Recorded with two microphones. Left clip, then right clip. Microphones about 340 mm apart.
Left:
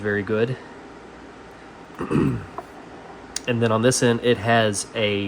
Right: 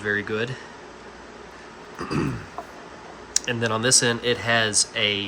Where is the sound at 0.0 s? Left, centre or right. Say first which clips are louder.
Left 3 dB; centre.